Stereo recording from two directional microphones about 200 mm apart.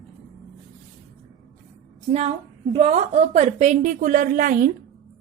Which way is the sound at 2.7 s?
30° right (ahead or behind).